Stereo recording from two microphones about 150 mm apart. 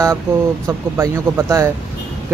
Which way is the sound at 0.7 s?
20° right (ahead or behind).